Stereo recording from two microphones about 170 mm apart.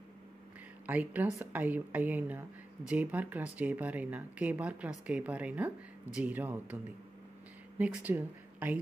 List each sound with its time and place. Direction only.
0.8 s speech: 10° right (ahead or behind)
7.8 s speech: 10° right (ahead or behind)